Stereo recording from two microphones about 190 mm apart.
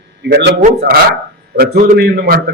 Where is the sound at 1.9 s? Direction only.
55° right (ahead or behind).